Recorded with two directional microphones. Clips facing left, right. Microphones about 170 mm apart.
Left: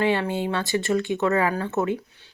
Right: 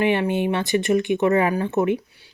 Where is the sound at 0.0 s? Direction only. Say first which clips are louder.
Right 3 dB; 20° right (ahead or behind).